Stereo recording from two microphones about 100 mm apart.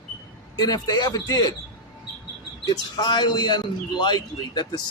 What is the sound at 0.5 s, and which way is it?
A man's voice, 45° left (ahead or behind).